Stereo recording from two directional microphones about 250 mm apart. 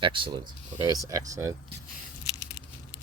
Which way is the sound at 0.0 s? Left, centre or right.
Centre.